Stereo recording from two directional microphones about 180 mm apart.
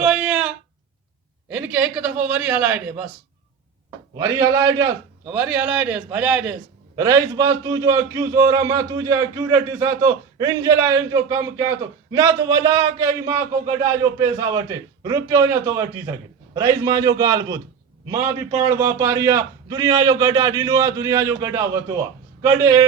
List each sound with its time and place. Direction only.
0.0 s a sound: 5° right (ahead or behind)
1.5 s a man's voice: 5° right (ahead or behind)
4.2 s a man's voice: 20° right (ahead or behind)
5.2 s a man's voice: 5° right (ahead or behind)
6.9 s a man's voice: 20° right (ahead or behind)